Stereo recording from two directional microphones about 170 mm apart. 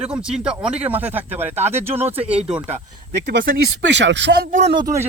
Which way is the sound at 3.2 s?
60° right (ahead or behind).